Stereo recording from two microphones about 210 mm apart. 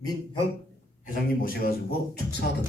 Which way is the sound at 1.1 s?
45° left (ahead or behind).